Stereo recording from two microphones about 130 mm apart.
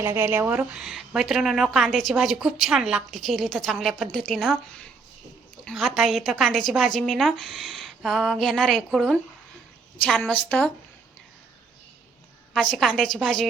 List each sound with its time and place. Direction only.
0.0 s speech: 20° right (ahead or behind)
0.7 s a woman's voice: 5° right (ahead or behind)
12.7 s a woman's voice: centre (ahead or behind)